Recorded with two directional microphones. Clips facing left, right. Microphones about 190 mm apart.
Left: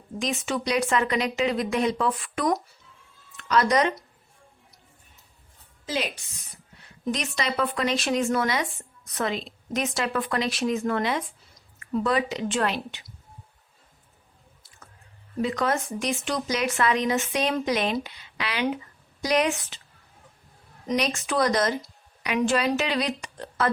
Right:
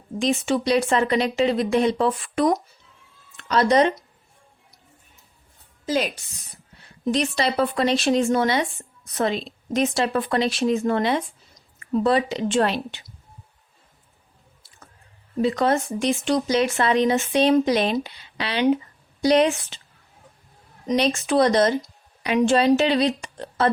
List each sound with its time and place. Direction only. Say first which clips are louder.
0.2 s speech: right 6 dB; 30° right (ahead or behind)
5.8 s a woman's voice: right 6 dB; 45° right (ahead or behind)
7.0 s speech: right 6 dB; 30° right (ahead or behind)
15.4 s speech: right 5 dB; 30° right (ahead or behind)
20.9 s speech: right 5 dB; 30° right (ahead or behind)